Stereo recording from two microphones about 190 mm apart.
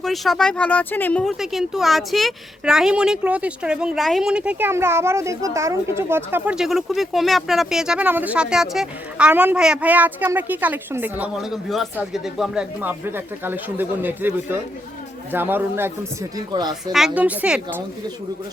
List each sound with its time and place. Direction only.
0.0 s a woman's voice: centre (ahead or behind)
16.5 s a woman's voice: 20° right (ahead or behind)
17.2 s a woman's voice: 10° right (ahead or behind)